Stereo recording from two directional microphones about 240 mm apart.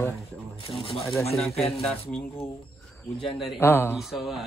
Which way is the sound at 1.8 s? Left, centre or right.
Centre.